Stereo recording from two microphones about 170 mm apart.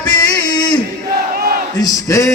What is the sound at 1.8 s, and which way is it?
Music, 20° left (ahead or behind).